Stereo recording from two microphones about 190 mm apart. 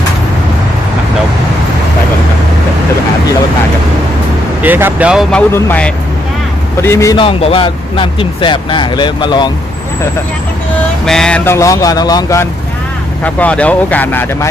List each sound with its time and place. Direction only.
4.6 s speech: 10° right (ahead or behind)
5.3 s speech: 10° left (ahead or behind)
11.0 s speech: 5° left (ahead or behind)
13.2 s speech: 5° left (ahead or behind)